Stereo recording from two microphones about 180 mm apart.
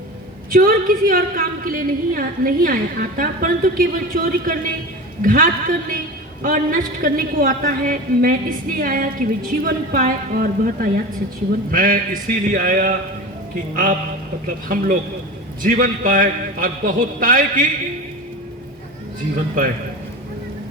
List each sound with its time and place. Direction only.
0.5 s a woman's voice: 50° right (ahead or behind)
14.4 s a woman's voice: 50° right (ahead or behind)